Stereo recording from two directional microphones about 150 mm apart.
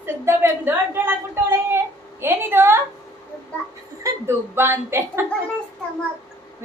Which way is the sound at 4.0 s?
15° right (ahead or behind).